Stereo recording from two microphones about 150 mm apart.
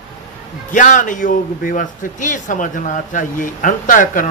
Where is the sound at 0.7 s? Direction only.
60° left (ahead or behind).